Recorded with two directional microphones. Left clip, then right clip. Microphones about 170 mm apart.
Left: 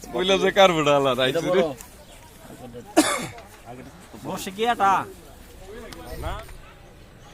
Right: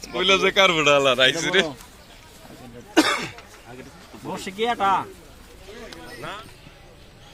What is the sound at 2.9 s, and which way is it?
Cough, 65° left (ahead or behind).